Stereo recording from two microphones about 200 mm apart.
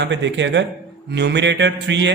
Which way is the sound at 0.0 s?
60° right (ahead or behind).